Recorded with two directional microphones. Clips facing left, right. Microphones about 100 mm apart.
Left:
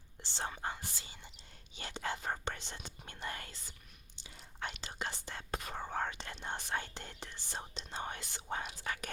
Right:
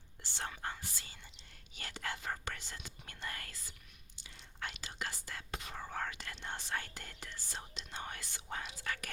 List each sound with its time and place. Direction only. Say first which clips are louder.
0.3 s speech: left 2 dB; 20° left (ahead or behind)
4.8 s speech: left 2 dB; 25° left (ahead or behind)
5.5 s speech: left 6 dB; 45° left (ahead or behind)
5.7 s speech: left 3 dB; 30° left (ahead or behind)